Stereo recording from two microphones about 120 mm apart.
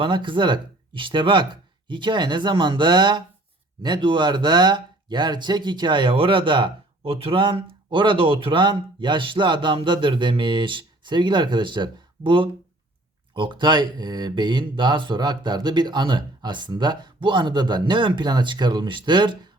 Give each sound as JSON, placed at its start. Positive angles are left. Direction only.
{"t": 0.0, "sound": "speech", "side_deg": -45}